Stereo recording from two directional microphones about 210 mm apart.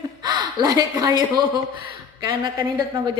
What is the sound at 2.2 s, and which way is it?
Speech, 20° right (ahead or behind).